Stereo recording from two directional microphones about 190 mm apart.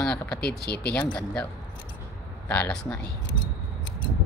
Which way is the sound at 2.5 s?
5° left (ahead or behind).